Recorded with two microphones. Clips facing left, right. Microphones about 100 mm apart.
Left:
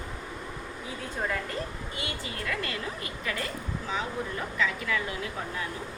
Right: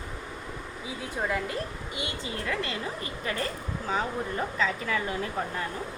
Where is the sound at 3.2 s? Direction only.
35° right (ahead or behind).